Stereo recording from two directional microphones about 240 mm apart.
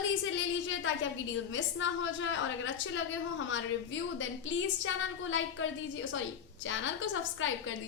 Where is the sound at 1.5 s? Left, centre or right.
Left.